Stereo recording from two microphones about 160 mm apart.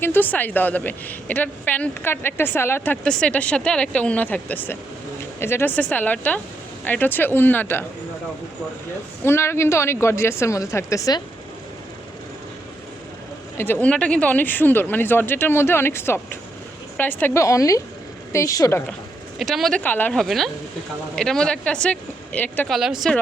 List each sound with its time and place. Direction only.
0.0 s a woman's voice: 15° left (ahead or behind)
9.2 s a woman's voice: 15° left (ahead or behind)
13.8 s a woman's voice: 5° left (ahead or behind)
19.4 s speech: centre (ahead or behind)